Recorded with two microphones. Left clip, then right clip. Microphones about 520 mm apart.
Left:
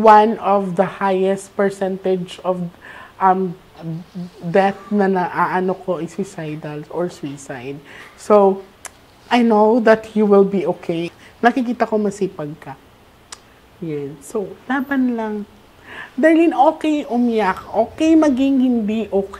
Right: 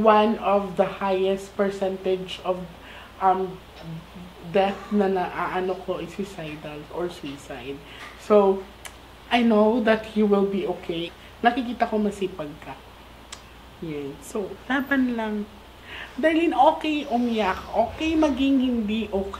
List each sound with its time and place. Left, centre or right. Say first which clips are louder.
0.0 s speech: left 8 dB; left
3.2 s speech: left 6 dB; left
4.5 s speech: left 6 dB; left
8.3 s a sound: left 6 dB; left
9.5 s speech: left 8 dB; left
14.3 s a woman's voice: left 5 dB; left
15.9 s speech: left 8 dB; left